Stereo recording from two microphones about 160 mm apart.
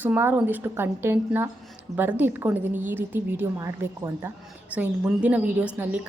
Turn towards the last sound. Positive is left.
turn(degrees=-10)  # may be behind; listen again after turning